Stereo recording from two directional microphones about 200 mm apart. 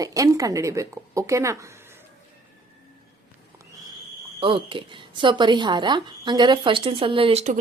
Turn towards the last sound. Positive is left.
turn(degrees=-35)  # may be behind; listen again after turning